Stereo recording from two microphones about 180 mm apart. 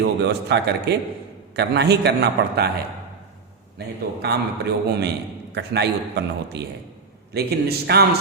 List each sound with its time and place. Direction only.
0.0 s a man's voice: 70° right (ahead or behind)
3.8 s a man's voice: 65° right (ahead or behind)